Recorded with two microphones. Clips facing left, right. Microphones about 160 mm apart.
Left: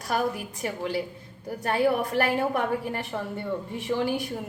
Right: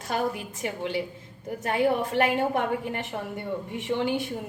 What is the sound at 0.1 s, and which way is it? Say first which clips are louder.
A woman's voice: left 1 dB; 20° right (ahead or behind).